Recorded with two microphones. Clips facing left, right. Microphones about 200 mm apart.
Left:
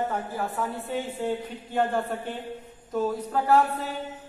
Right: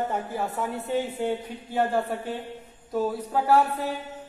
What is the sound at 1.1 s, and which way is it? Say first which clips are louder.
Speech: right 1 dB; 10° right (ahead or behind).